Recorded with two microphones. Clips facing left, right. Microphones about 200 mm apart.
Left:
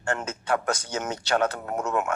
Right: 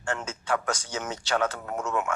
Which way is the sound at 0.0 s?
60° left (ahead or behind).